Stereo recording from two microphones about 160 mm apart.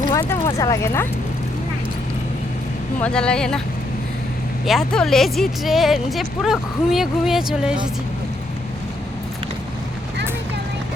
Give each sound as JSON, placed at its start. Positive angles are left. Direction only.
{"t": 0.1, "sound": "speech", "side_deg": 15}
{"t": 3.0, "sound": "speech", "side_deg": 5}
{"t": 4.6, "sound": "speech", "side_deg": 0}